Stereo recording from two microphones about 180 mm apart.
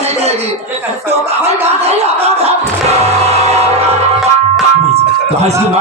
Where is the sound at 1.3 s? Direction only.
35° right (ahead or behind).